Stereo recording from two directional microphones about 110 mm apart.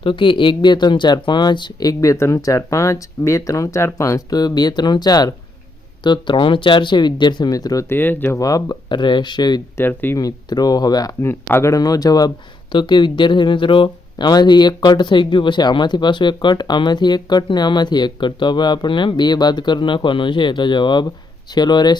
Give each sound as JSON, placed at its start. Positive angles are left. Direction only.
{"t": 0.0, "sound": "speech", "side_deg": 50}
{"t": 7.9, "sound": "speech", "side_deg": 20}
{"t": 8.4, "sound": "speech", "side_deg": 30}
{"t": 8.9, "sound": "speech", "side_deg": 45}
{"t": 9.7, "sound": "speech", "side_deg": 20}
{"t": 10.2, "sound": "speech", "side_deg": 35}
{"t": 11.2, "sound": "speech", "side_deg": 20}